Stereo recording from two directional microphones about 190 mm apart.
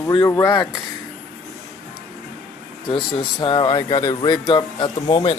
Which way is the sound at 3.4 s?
25° left (ahead or behind).